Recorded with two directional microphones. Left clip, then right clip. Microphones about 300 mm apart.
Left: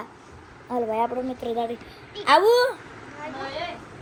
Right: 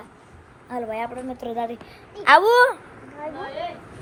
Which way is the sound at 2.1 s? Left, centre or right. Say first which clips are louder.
Right 3 dB; centre.